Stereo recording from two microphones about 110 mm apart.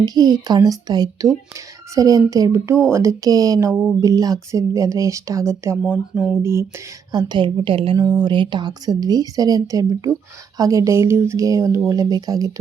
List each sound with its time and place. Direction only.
0.0 s speech: 35° right (ahead or behind)
3.7 s a sound: 5° left (ahead or behind)
4.0 s speech: 30° right (ahead or behind)
7.1 s a woman's voice: 40° right (ahead or behind)